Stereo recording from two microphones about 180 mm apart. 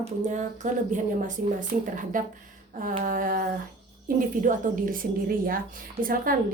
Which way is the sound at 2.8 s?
50° right (ahead or behind).